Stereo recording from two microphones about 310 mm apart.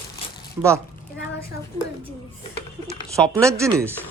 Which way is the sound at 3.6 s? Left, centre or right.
Centre.